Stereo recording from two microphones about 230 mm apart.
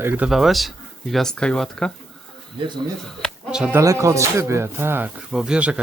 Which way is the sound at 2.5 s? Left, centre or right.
Centre.